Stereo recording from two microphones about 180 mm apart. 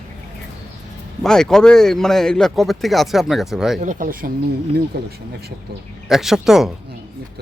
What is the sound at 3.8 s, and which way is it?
Speech, 45° right (ahead or behind).